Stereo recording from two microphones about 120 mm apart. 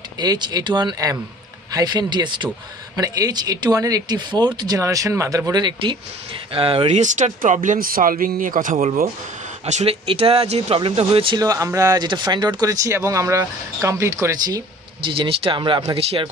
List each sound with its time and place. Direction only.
0.2 s speech: 35° right (ahead or behind)
6.5 s speech: 50° right (ahead or behind)
6.9 s speech: 90° right; by 9.9 s 75° right (ahead or behind)
10.0 s speech: 50° right (ahead or behind)
11.3 s speech: 30° right (ahead or behind)
15.0 s speech: 50° right (ahead or behind)
16.0 s speech: 55° right (ahead or behind)